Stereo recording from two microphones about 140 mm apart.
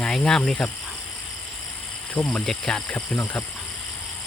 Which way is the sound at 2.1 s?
5° left (ahead or behind).